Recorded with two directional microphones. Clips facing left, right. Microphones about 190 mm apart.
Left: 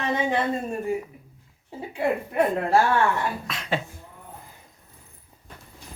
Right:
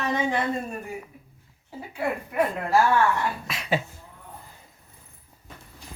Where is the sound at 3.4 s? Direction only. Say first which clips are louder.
Right 1 dB; 5° right (ahead or behind).